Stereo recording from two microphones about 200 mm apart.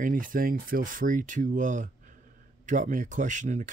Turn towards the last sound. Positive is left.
turn(degrees=-40)  # may be behind; listen again after turning